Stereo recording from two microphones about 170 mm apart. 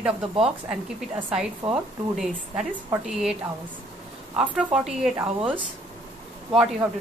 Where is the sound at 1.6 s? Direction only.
15° right (ahead or behind).